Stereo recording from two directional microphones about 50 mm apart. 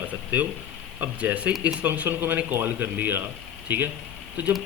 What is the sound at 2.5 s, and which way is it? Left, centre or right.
Speech, right.